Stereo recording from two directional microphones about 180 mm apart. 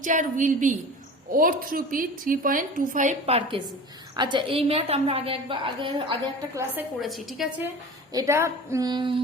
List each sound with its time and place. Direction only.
0.0 s a woman's voice: 45° right (ahead or behind); by 6.6 s 25° right (ahead or behind)
7.0 s a woman's voice: centre (ahead or behind)
8.1 s a woman's voice: 15° right (ahead or behind)